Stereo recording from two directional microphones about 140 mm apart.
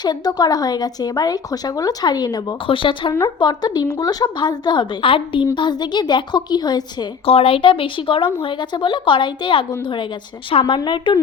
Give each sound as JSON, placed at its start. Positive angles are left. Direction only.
{"t": 0.0, "sound": "speech", "side_deg": 30}
{"t": 3.1, "sound": "a woman's voice", "side_deg": 30}
{"t": 7.3, "sound": "a woman's voice", "side_deg": 40}